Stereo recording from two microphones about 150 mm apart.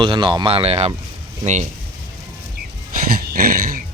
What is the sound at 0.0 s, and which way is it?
Speech, 30° right (ahead or behind).